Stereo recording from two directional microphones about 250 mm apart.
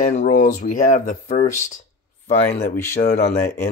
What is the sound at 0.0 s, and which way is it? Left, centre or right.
Speech, left.